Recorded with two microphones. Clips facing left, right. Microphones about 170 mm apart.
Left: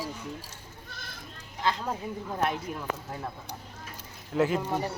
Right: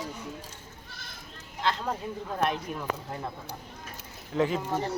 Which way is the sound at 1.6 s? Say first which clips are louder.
Even; 10° left (ahead or behind).